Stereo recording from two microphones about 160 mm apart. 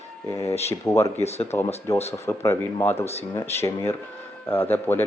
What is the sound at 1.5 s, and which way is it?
Speech, 15° left (ahead or behind).